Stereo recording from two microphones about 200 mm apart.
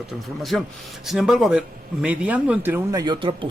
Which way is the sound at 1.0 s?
Centre (ahead or behind).